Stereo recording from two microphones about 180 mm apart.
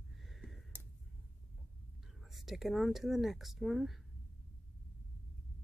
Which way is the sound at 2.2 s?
Centre (ahead or behind).